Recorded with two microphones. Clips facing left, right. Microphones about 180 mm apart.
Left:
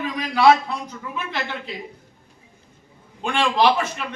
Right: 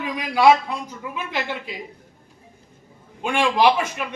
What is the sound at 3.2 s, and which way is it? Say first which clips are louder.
Speech: right 1 dB; 10° right (ahead or behind).